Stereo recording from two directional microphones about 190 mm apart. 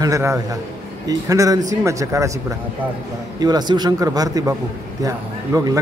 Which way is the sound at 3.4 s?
20° right (ahead or behind).